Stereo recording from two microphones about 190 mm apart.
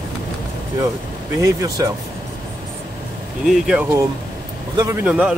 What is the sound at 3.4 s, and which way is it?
Speech, 5° right (ahead or behind).